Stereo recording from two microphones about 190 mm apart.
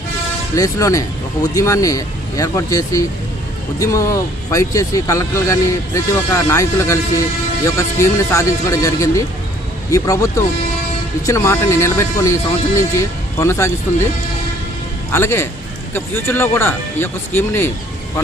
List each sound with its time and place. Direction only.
0.5 s speech: 15° left (ahead or behind)
4.5 s speech: 15° left (ahead or behind)
15.1 s speech: 10° left (ahead or behind)